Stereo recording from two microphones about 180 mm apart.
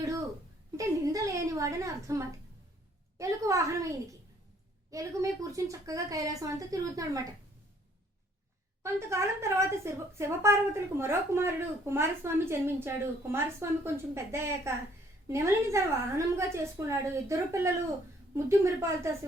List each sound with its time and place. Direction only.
0.8 s a woman's voice: 20° right (ahead or behind)
4.9 s speech: 20° right (ahead or behind)
8.8 s a woman's voice: 15° right (ahead or behind)